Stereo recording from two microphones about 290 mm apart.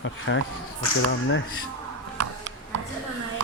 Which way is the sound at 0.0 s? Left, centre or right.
Left.